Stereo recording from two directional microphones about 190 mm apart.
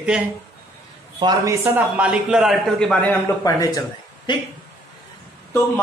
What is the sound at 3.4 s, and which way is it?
Speech, 20° left (ahead or behind).